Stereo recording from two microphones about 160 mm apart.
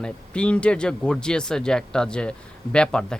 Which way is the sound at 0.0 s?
5° left (ahead or behind).